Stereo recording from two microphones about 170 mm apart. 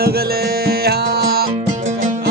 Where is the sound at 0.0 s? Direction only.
65° right (ahead or behind).